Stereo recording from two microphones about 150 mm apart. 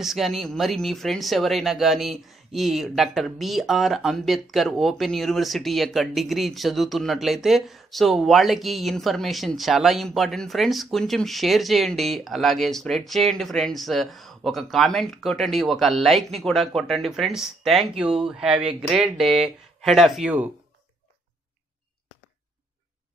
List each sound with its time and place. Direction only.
0.0 s speech: centre (ahead or behind)
19.2 s speech: 40° right (ahead or behind)
19.8 s speech: centre (ahead or behind)